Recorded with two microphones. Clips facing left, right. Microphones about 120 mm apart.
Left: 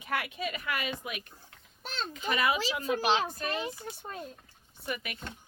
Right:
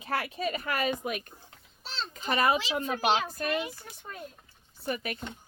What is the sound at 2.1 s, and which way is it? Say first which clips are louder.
Speech: right 3 dB; 40° right (ahead or behind).